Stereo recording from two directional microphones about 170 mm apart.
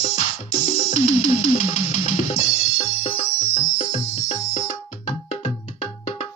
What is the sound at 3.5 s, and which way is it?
Music, 45° left (ahead or behind).